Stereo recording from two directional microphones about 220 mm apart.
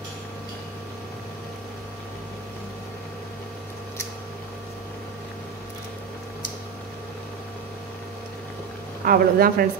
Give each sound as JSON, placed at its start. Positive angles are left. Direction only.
{"t": 9.0, "sound": "speech", "side_deg": -40}